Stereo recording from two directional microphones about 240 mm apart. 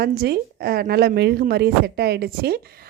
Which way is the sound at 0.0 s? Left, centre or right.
Right.